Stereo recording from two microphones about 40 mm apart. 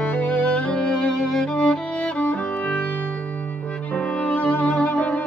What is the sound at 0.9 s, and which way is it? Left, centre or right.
Music, left.